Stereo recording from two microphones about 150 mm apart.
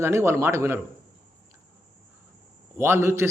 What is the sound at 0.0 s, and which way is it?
Speech, 15° right (ahead or behind).